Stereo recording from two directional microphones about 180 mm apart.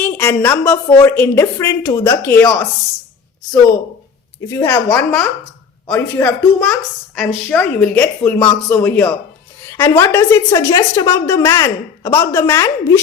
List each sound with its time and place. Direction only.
0.0 s a woman's voice: 10° left (ahead or behind)
4.4 s a woman's voice: 15° left (ahead or behind)